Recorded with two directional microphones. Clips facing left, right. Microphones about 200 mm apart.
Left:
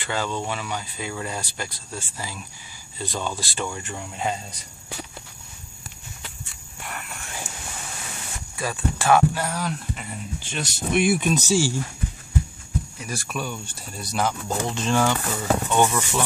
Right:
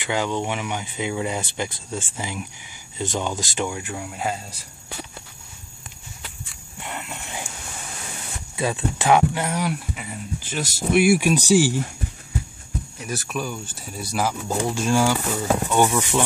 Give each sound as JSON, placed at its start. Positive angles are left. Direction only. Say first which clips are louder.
{"t": 0.0, "sound": "speech", "louder": "right 3 dB", "side_deg": -15}
{"t": 6.8, "sound": "a sound", "louder": "right 3 dB", "side_deg": -20}
{"t": 8.5, "sound": "speech", "louder": "right 3 dB", "side_deg": -20}
{"t": 13.0, "sound": "speech", "louder": "right 5 dB", "side_deg": 0}